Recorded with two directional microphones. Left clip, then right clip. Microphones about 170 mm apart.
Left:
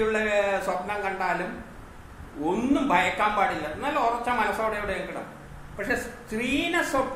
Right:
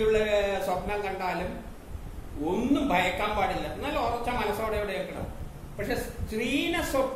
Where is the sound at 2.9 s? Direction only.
10° left (ahead or behind).